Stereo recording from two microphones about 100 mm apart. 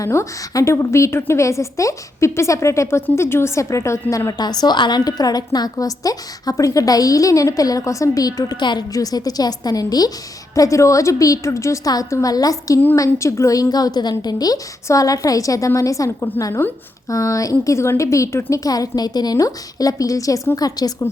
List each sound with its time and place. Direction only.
0.0 s a woman's voice: 30° left (ahead or behind)